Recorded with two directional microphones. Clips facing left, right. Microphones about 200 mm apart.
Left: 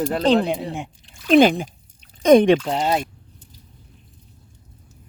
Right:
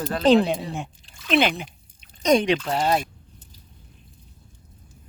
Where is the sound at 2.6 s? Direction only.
20° left (ahead or behind).